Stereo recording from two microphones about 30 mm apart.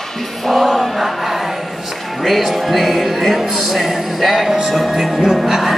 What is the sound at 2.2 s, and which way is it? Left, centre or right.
Music, centre.